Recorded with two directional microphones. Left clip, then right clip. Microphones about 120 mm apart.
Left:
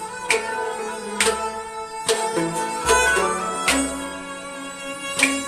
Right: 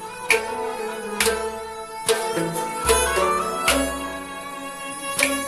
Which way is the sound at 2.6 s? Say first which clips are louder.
Left 3 dB; 40° left (ahead or behind).